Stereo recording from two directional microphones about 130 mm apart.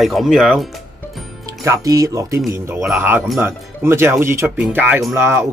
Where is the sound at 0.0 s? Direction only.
Centre (ahead or behind).